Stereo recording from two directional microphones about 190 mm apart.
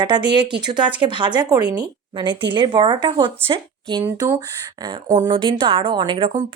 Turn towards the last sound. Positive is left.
turn(degrees=-25)  # may be behind; listen again after turning